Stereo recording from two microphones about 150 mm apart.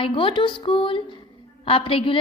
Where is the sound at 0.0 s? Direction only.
35° left (ahead or behind).